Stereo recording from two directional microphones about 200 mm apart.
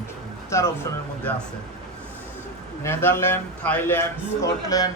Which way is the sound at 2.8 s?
10° left (ahead or behind).